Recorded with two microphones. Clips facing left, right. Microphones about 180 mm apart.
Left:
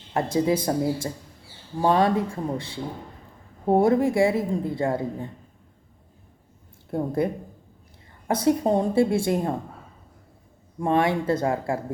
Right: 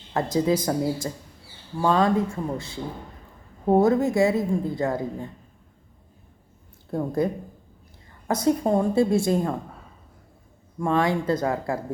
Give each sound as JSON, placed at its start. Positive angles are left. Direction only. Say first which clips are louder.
{"t": 0.1, "sound": "a woman's voice", "louder": "even", "side_deg": 25}
{"t": 6.9, "sound": "a woman's voice", "louder": "even", "side_deg": 25}
{"t": 8.3, "sound": "a woman's voice", "louder": "even", "side_deg": 30}
{"t": 10.8, "sound": "a woman's voice", "louder": "left 1 dB", "side_deg": 25}